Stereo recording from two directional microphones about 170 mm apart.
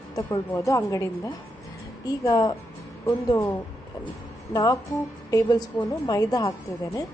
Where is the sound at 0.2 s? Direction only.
20° left (ahead or behind).